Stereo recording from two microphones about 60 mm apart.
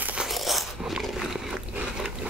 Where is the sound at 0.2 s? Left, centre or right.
Centre.